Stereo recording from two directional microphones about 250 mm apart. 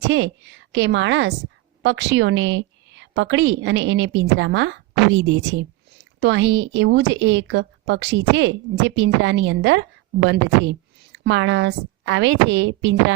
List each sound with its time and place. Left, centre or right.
0.0 s a woman's voice: right